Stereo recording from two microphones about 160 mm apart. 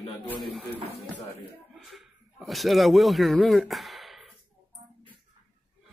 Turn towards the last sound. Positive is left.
turn(degrees=0)  # may be behind; listen again after turning